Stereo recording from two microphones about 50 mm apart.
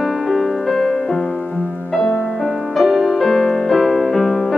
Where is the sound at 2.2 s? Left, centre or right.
Centre.